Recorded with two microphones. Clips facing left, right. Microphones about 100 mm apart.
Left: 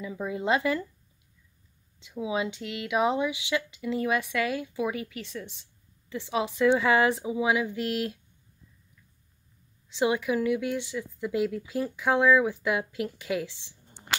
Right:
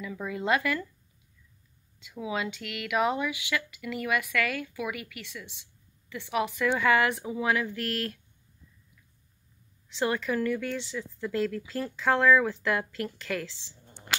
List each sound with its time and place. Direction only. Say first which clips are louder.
0.0 s speech: left 2 dB; 25° left (ahead or behind)
2.0 s speech: left 3 dB; 20° left (ahead or behind)
9.8 s a woman's voice: left 3 dB; 15° left (ahead or behind)